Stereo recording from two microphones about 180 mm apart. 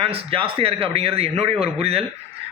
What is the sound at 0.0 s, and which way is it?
A man's voice, 30° right (ahead or behind).